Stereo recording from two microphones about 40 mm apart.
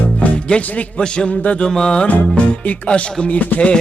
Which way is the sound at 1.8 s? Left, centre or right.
Left.